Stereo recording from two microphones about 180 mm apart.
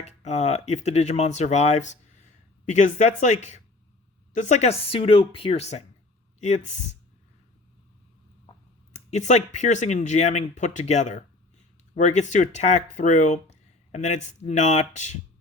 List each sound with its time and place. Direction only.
0.0 s speech: 40° left (ahead or behind)
8.9 s speech: 40° left (ahead or behind)